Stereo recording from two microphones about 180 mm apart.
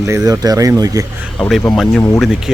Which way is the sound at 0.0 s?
20° right (ahead or behind).